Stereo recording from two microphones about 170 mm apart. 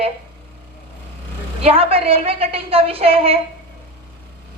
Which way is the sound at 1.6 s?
35° right (ahead or behind).